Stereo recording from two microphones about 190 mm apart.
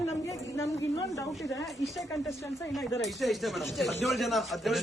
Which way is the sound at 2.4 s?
15° left (ahead or behind).